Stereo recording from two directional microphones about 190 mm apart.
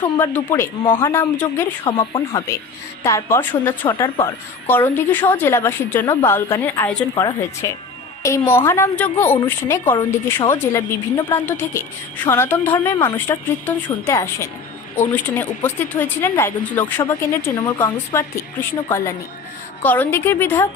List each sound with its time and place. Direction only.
0.2 s a woman's voice: 10° left (ahead or behind)
1.8 s a woman's voice: 25° left (ahead or behind)